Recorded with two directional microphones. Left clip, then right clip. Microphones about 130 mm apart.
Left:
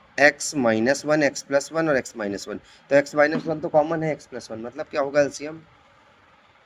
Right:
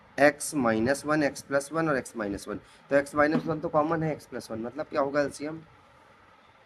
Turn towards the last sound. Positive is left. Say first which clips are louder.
# left 6 dB
turn(degrees=45)  # may be behind; listen again after turning